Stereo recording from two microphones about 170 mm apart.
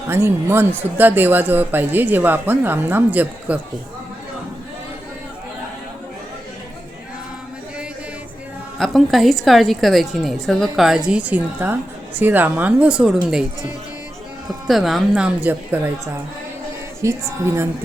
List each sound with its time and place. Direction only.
0.1 s speech: 15° right (ahead or behind)
8.8 s a woman's voice: centre (ahead or behind)
14.7 s a woman's voice: centre (ahead or behind)
17.0 s speech: 15° right (ahead or behind)